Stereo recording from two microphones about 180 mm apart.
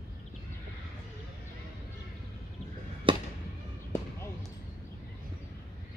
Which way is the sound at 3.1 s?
30° right (ahead or behind).